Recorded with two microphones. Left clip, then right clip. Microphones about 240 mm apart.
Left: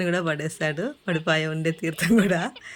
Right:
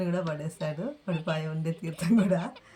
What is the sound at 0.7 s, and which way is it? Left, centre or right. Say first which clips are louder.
Speech: left 7 dB; left.